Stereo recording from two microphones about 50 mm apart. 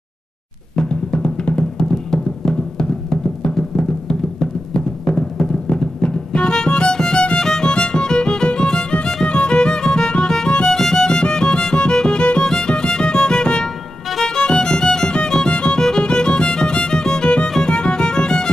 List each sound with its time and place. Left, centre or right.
0.7 s music: left
1.8 s music: centre
4.4 s timpani: centre
7.4 s music: centre